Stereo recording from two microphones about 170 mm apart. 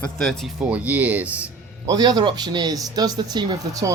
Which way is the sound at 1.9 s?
25° right (ahead or behind).